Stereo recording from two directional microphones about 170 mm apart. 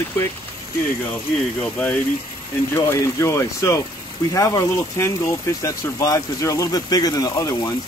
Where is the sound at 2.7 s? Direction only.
15° left (ahead or behind).